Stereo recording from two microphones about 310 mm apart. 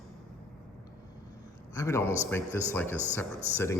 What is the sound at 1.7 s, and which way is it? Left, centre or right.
Speech, centre.